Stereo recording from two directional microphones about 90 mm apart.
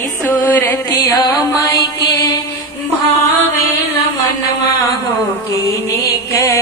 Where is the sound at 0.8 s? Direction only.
40° left (ahead or behind).